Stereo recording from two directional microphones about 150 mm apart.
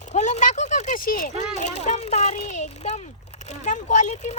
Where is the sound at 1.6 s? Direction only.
50° left (ahead or behind).